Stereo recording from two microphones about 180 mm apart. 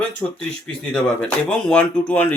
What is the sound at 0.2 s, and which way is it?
Speech, 15° left (ahead or behind).